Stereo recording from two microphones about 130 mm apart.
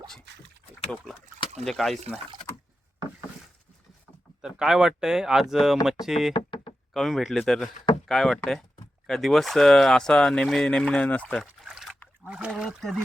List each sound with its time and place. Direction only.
1.6 s speech: centre (ahead or behind)
4.4 s speech: 5° right (ahead or behind)
6.3 s knock: 40° left (ahead or behind)
6.9 s speech: centre (ahead or behind)
11.6 s a sound: 5° right (ahead or behind)